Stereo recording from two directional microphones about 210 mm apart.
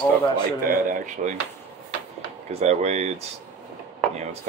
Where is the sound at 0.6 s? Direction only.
40° right (ahead or behind).